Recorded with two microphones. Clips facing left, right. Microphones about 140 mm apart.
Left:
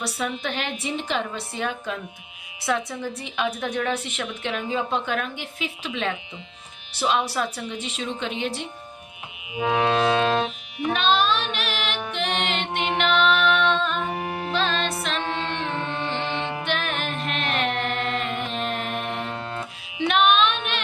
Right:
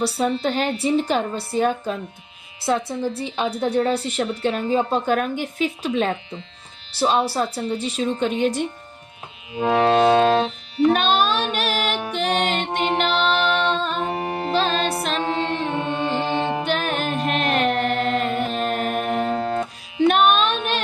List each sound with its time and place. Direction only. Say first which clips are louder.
0.0 s a woman's voice: right 7 dB; 30° right (ahead or behind)
9.9 s a woman's voice: right 8 dB; 40° right (ahead or behind)
10.4 s music: right 8 dB; 15° left (ahead or behind)
10.9 s music: right 2 dB; 45° right (ahead or behind)